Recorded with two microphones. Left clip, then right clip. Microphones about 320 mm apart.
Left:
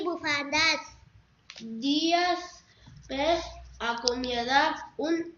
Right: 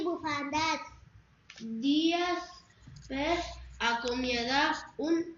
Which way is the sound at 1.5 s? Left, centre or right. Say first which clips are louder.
Left 1 dB; centre.